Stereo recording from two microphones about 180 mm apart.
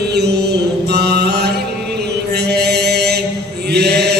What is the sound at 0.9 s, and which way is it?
Mantra, 65° right (ahead or behind).